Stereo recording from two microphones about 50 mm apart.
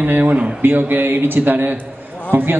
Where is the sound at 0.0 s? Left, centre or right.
Right.